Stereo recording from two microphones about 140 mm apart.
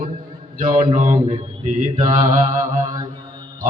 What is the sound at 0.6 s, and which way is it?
A man's voice, 60° right (ahead or behind).